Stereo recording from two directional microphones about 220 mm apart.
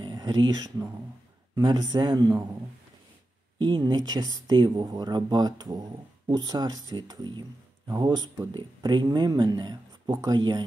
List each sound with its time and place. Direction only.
0.0 s a sound: 20° right (ahead or behind)
0.5 s speech: 15° right (ahead or behind)
3.5 s speech: 20° right (ahead or behind)